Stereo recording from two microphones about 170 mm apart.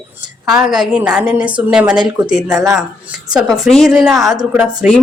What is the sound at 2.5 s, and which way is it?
Speech, 20° right (ahead or behind).